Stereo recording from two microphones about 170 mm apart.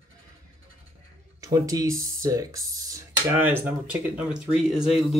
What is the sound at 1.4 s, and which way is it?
Speech, 20° right (ahead or behind).